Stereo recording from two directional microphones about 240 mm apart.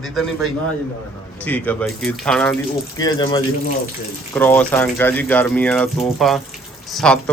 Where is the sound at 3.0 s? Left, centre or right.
Centre.